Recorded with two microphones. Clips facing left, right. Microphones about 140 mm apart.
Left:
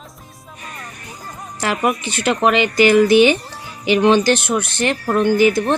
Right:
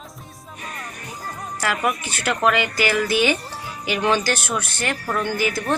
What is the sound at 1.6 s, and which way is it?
Speech, 25° left (ahead or behind).